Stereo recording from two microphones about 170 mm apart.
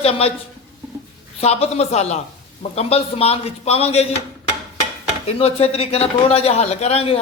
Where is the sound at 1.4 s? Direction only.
35° left (ahead or behind).